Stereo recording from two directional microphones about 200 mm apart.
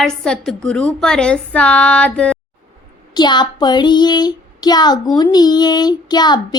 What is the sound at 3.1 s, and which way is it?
Speech, 20° left (ahead or behind).